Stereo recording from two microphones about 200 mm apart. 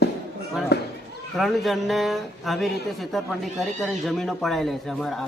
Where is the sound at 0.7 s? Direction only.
55° left (ahead or behind).